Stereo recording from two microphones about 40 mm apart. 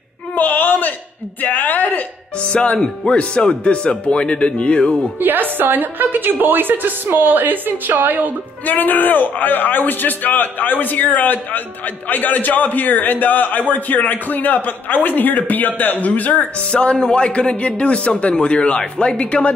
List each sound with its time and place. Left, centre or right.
0.4 s a sound: left
1.4 s a man's voice: left
2.5 s speech: left
5.2 s a woman's voice: right
8.6 s a man's voice: left
16.5 s speech: left